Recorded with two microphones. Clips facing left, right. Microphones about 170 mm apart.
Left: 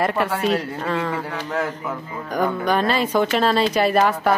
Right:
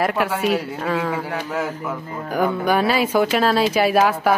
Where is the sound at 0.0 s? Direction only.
Centre (ahead or behind).